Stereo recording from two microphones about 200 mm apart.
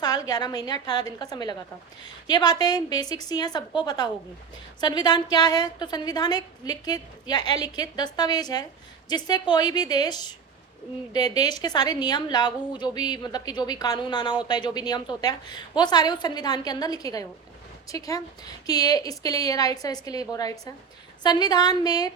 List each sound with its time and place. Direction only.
0.0 s a woman's voice: 20° left (ahead or behind)